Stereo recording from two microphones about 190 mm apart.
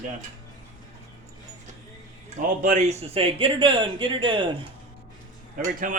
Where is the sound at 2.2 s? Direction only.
40° right (ahead or behind).